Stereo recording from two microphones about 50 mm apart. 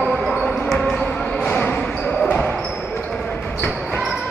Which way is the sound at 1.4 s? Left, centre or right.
Left.